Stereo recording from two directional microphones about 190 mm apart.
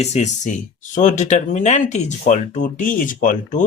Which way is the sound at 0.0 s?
35° left (ahead or behind).